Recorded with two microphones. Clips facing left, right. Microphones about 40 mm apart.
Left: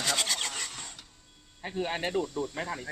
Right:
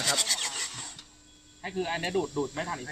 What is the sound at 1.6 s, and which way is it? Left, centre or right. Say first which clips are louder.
Speech: even; centre.